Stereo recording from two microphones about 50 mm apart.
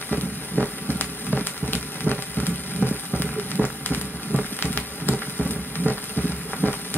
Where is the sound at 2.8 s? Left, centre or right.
Left.